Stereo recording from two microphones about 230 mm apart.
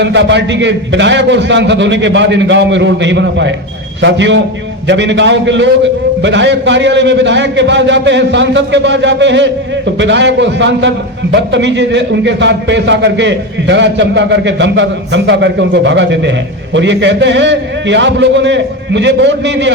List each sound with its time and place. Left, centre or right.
0.0 s a man's voice: right